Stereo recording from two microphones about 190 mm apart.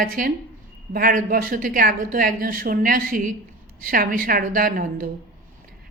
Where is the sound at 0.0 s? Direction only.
50° right (ahead or behind).